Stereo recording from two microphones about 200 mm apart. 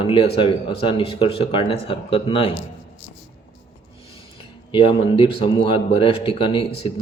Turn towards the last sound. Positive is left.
turn(degrees=25)  # may be behind; listen again after turning